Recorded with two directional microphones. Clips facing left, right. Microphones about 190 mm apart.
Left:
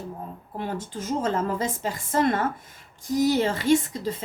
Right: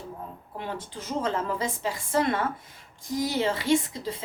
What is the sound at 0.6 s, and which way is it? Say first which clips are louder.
A woman's voice: left 5 dB; 45° left (ahead or behind).